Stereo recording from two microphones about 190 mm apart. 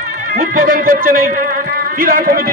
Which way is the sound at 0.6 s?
45° right (ahead or behind).